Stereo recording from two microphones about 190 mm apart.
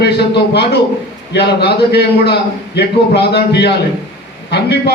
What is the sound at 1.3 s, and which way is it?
A man's voice, 60° left (ahead or behind).